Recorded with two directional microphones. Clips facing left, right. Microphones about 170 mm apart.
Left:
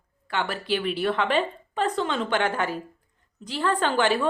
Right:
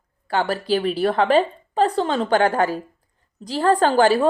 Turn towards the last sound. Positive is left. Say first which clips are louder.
# right 7 dB
turn(degrees=-40)  # may be behind; listen again after turning